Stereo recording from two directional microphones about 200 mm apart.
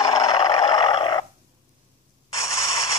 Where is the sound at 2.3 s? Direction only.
15° left (ahead or behind).